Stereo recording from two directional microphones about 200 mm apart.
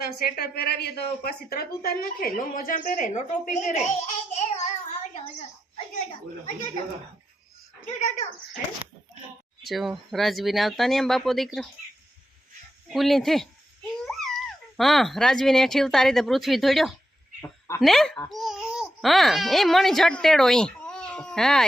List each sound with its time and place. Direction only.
0.0 s a woman's voice: 50° left (ahead or behind); by 3.9 s 35° left (ahead or behind)
4.4 s child singing: 35° left (ahead or behind)
7.9 s a child's voice: 35° left (ahead or behind)
9.6 s speech: centre (ahead or behind)
12.9 s a child's voice: centre (ahead or behind)